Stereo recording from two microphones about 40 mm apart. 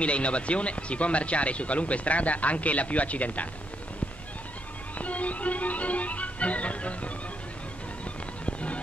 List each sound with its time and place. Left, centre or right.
0.0 s speech: left
4.9 s music: left
8.5 s music: left